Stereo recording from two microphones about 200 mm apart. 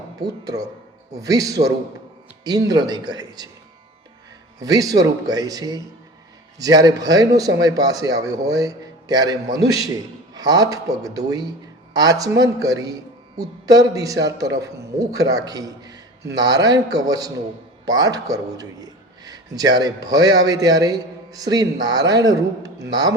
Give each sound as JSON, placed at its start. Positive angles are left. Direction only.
{"t": 0.2, "sound": "a man's voice", "side_deg": -20}
{"t": 4.6, "sound": "a man's voice", "side_deg": -20}